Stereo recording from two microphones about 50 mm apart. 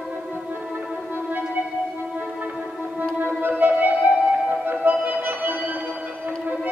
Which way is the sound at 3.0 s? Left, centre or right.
Right.